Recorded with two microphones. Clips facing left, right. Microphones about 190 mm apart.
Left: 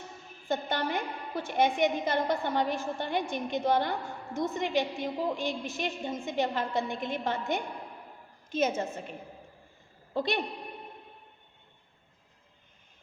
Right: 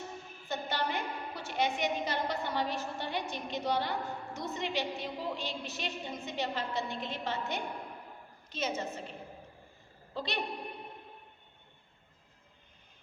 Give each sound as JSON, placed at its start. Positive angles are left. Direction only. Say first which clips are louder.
{"t": 0.4, "sound": "a woman's voice", "louder": "left 4 dB", "side_deg": 50}
{"t": 10.2, "sound": "a woman's voice", "louder": "left 7 dB", "side_deg": 50}